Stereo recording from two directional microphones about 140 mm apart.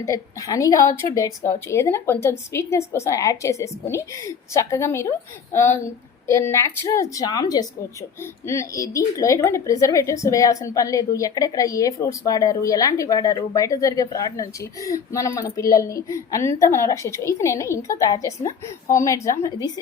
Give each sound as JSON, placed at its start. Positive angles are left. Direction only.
{"t": 0.0, "sound": "a woman's voice", "side_deg": 25}